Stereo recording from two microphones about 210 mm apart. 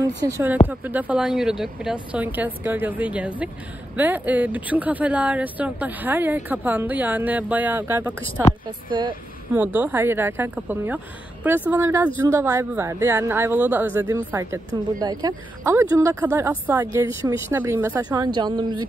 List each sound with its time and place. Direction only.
0.2 s speech: 15° right (ahead or behind)
8.3 s a woman's voice: 25° left (ahead or behind)
9.5 s speech: 10° right (ahead or behind)